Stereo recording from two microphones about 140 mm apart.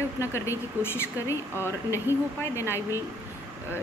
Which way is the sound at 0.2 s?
20° left (ahead or behind).